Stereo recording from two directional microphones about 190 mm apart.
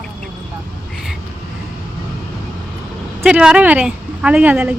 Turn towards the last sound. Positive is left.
turn(degrees=-10)  # may be behind; listen again after turning